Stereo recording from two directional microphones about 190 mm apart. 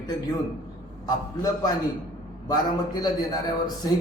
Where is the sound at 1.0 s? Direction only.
20° left (ahead or behind).